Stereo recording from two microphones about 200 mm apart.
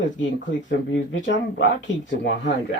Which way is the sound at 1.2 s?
65° left (ahead or behind).